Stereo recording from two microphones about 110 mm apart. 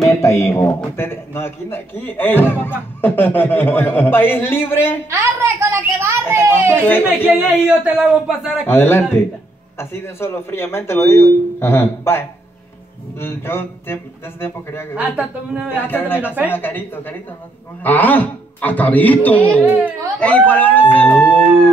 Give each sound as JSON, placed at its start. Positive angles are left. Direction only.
{"t": 0.2, "sound": "speech", "side_deg": 25}
{"t": 5.1, "sound": "a woman's voice", "side_deg": -25}
{"t": 7.2, "sound": "speech", "side_deg": -10}
{"t": 8.6, "sound": "speech", "side_deg": 20}
{"t": 15.0, "sound": "speech", "side_deg": -15}
{"t": 15.8, "sound": "speech", "side_deg": 20}